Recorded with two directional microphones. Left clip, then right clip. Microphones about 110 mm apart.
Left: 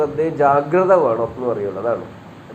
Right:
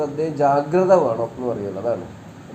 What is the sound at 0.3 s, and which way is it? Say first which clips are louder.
Speech: left 2 dB; 10° left (ahead or behind).